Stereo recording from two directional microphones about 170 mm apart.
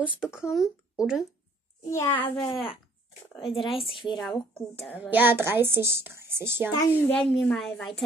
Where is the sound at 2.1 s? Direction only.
30° left (ahead or behind).